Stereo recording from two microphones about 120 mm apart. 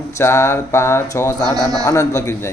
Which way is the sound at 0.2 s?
25° left (ahead or behind).